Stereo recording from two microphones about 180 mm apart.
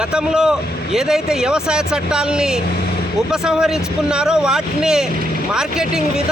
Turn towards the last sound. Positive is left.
turn(degrees=-5)  # may be behind; listen again after turning